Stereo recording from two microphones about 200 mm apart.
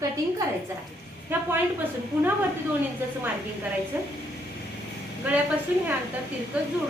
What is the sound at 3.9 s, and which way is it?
Speech, 10° right (ahead or behind).